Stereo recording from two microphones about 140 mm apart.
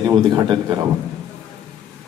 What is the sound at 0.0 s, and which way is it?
Speech, 30° right (ahead or behind).